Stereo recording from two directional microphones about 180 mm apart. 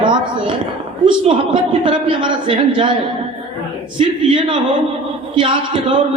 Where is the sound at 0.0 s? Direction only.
25° right (ahead or behind).